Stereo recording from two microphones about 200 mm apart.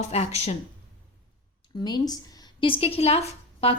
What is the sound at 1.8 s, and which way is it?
A woman's voice, 20° left (ahead or behind).